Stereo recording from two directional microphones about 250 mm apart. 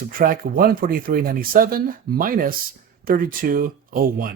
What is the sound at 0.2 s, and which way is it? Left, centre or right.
Speech, right.